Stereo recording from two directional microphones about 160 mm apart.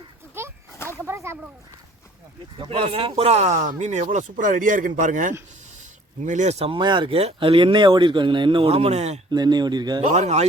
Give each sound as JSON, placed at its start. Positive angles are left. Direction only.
{"t": 0.4, "sound": "a sound", "side_deg": -15}
{"t": 2.6, "sound": "speech", "side_deg": -35}
{"t": 6.7, "sound": "speech", "side_deg": -30}
{"t": 9.3, "sound": "speech", "side_deg": -25}
{"t": 10.1, "sound": "speech", "side_deg": -45}